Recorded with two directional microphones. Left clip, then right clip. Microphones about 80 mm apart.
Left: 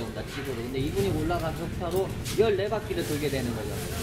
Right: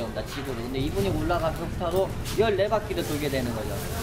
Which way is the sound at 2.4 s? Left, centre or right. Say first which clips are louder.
Right 3 dB; right.